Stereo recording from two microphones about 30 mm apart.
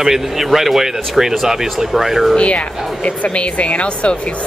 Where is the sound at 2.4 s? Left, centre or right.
Left.